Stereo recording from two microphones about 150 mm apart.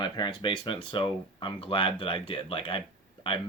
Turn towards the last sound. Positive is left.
turn(degrees=35)  # may be behind; listen again after turning